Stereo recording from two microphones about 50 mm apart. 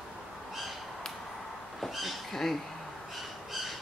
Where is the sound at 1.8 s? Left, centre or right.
Centre.